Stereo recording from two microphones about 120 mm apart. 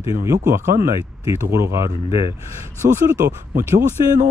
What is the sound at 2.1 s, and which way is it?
Speech, 50° left (ahead or behind).